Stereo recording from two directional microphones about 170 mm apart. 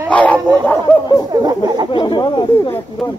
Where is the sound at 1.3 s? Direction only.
25° right (ahead or behind).